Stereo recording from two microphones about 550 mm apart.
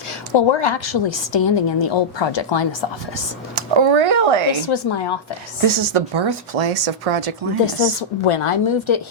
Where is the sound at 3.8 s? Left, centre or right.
Right.